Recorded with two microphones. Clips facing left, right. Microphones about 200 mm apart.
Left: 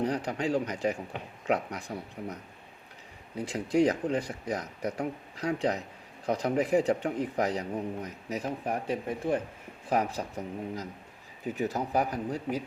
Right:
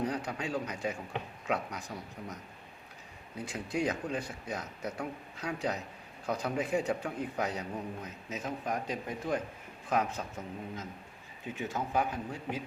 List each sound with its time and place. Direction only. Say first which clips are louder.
0.0 s a man's voice: left 5 dB; 30° left (ahead or behind)